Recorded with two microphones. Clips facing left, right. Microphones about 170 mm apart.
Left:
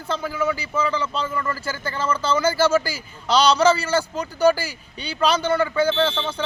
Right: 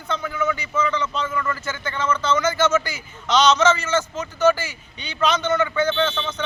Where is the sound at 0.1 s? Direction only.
30° left (ahead or behind).